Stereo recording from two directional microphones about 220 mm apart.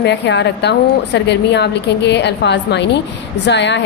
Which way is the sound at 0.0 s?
50° left (ahead or behind).